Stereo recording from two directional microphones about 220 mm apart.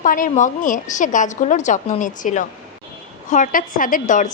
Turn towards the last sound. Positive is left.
turn(degrees=35)  # may be behind; listen again after turning